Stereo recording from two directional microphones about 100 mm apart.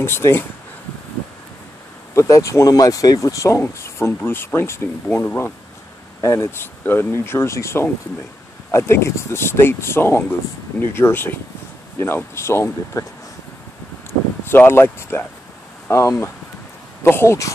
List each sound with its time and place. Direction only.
0.0 s speech: 25° left (ahead or behind)
2.1 s speech: 30° left (ahead or behind)
14.4 s speech: 25° left (ahead or behind)